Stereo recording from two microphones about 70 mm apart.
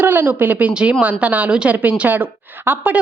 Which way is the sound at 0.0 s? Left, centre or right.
Right.